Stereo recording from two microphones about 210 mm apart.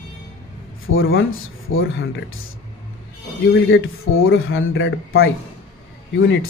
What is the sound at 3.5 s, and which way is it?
Speech, 70° left (ahead or behind).